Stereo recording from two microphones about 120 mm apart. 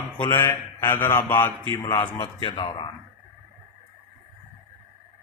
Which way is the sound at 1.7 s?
40° left (ahead or behind).